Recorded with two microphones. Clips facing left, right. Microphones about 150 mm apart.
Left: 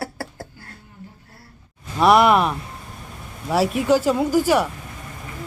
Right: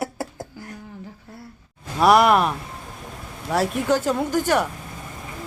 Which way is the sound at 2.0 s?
Centre (ahead or behind).